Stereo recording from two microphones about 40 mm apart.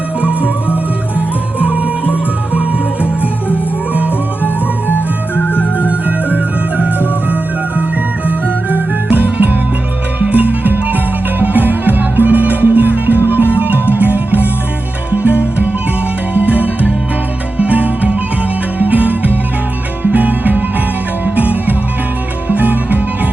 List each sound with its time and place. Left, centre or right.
0.2 s music: right
1.5 s music: right
3.5 s music: right
5.8 s music: right
8.7 s music: right